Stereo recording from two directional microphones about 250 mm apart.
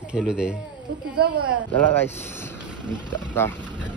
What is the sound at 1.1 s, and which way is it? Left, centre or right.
Speech, right.